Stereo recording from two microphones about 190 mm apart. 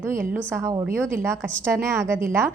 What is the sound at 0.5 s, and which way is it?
A woman's voice, 20° right (ahead or behind).